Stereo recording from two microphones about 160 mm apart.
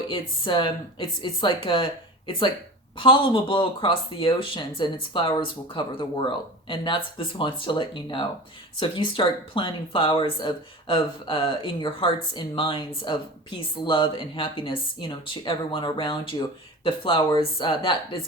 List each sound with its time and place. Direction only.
0.1 s speech: 30° left (ahead or behind)